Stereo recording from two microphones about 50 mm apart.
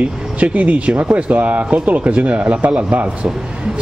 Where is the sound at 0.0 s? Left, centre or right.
Right.